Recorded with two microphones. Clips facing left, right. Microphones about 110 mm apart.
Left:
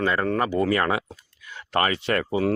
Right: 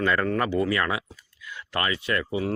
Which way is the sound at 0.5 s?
40° left (ahead or behind).